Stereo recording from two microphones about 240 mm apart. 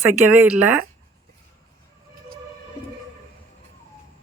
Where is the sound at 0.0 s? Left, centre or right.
Centre.